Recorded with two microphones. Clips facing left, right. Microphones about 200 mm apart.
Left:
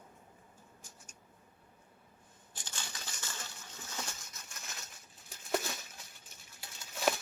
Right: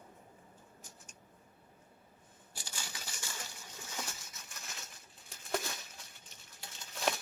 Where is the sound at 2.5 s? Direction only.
10° right (ahead or behind).